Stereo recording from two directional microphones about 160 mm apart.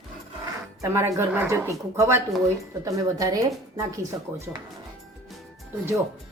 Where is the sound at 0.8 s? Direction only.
15° right (ahead or behind).